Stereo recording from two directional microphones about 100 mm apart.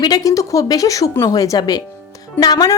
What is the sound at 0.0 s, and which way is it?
Speech, 35° left (ahead or behind).